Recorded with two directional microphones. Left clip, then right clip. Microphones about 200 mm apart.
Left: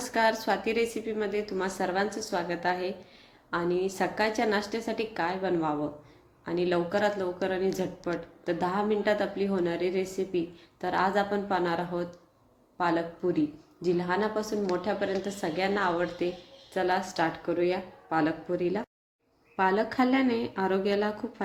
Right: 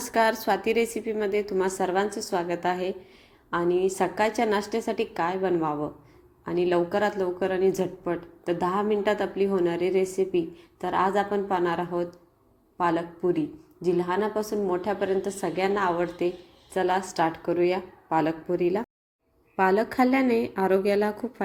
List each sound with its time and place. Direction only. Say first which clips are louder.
0.0 s a woman's voice: right 3 dB; 20° right (ahead or behind)